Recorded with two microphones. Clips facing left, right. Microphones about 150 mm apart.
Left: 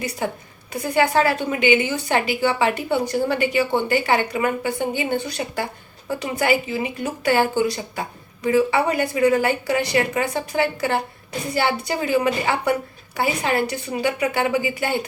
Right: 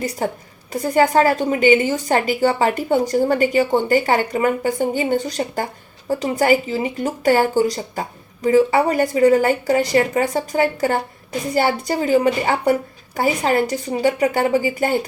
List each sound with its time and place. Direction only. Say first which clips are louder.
0.8 s a woman's voice: right 3 dB; 40° right (ahead or behind)